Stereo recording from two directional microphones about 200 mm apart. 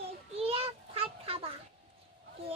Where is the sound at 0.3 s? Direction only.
30° right (ahead or behind).